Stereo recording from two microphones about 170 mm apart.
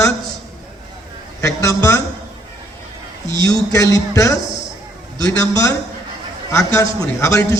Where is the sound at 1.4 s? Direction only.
20° left (ahead or behind).